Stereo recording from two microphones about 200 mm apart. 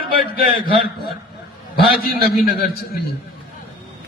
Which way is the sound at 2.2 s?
50° left (ahead or behind).